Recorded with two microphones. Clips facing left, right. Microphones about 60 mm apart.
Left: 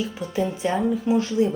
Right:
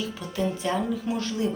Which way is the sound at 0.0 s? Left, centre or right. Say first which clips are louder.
Left 3 dB; left.